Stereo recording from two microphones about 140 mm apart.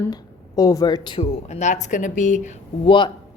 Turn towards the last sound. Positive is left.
turn(degrees=35)  # may be behind; listen again after turning